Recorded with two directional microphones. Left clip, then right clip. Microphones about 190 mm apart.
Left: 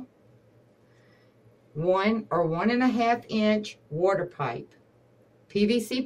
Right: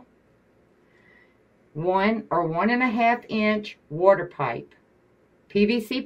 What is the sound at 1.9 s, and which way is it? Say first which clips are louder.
Speech: right 2 dB; 25° right (ahead or behind).